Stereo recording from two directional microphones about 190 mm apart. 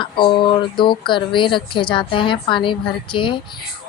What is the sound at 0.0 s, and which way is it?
Speech, 25° left (ahead or behind).